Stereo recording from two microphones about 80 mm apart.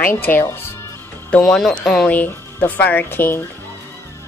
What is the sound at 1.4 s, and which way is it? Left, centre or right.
Speech, centre.